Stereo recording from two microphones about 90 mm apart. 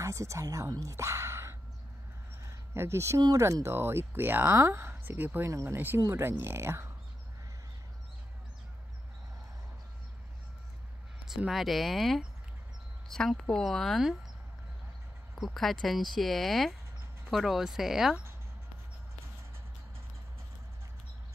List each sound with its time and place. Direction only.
0.0 s a woman's voice: 35° right (ahead or behind)
2.4 s a sound: 30° right (ahead or behind)
3.3 s speech: 30° right (ahead or behind)
5.5 s speech: 35° right (ahead or behind)
11.2 s speech: 5° right (ahead or behind)
15.3 s speech: centre (ahead or behind)